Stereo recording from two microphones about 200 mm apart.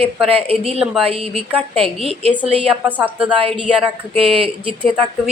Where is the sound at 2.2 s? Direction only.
30° right (ahead or behind).